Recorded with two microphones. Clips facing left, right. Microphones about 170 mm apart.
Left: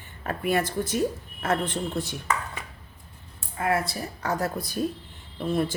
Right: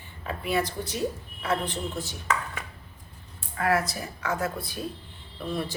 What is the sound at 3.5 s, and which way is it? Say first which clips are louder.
A woman's voice: even; 25° left (ahead or behind).